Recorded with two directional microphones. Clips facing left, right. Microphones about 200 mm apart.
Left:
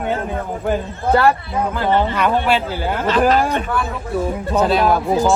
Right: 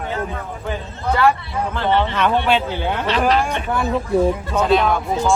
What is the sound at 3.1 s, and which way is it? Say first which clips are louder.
Speech: left 4 dB; 45° left (ahead or behind).